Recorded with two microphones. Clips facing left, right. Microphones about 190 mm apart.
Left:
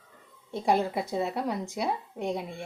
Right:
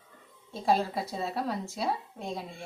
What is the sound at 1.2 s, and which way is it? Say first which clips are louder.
A woman's voice: left 2 dB; 15° left (ahead or behind).